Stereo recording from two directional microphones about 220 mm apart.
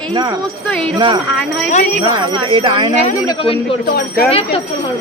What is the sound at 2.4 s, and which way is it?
Speech, 20° right (ahead or behind).